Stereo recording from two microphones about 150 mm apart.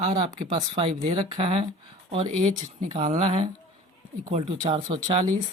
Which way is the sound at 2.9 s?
45° right (ahead or behind).